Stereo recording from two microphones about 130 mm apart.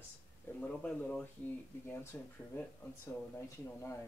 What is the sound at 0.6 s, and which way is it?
Speech, 10° left (ahead or behind).